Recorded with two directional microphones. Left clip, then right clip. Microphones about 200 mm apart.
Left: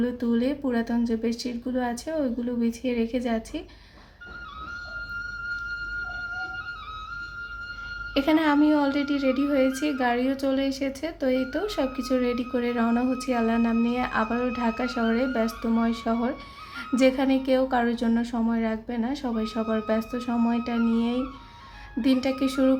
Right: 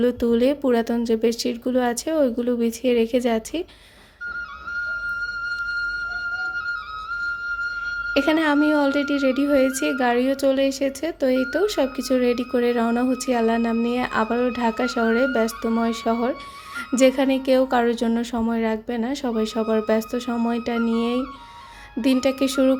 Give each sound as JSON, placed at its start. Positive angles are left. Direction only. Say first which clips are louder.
{"t": 0.0, "sound": "a woman's voice", "louder": "right 8 dB", "side_deg": -40}
{"t": 8.1, "sound": "a woman's voice", "louder": "right 2 dB", "side_deg": -30}